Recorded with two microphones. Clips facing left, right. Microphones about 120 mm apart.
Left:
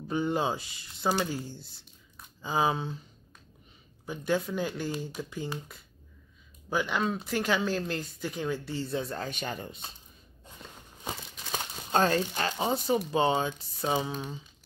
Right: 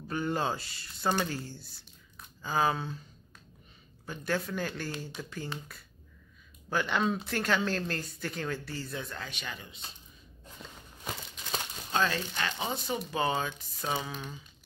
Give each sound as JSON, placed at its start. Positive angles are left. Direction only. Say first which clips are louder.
{"t": 0.1, "sound": "speech", "louder": "left 3 dB", "side_deg": 15}
{"t": 4.0, "sound": "speech", "louder": "left 4 dB", "side_deg": 15}
{"t": 11.9, "sound": "speech", "louder": "left 5 dB", "side_deg": 45}